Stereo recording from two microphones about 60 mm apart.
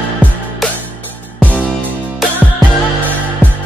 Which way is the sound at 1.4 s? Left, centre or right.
Left.